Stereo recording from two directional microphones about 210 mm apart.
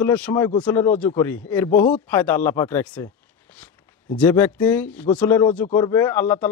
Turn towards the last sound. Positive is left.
turn(degrees=10)  # may be behind; listen again after turning